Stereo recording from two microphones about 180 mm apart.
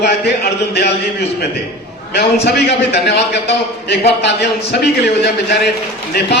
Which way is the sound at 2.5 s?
70° left (ahead or behind).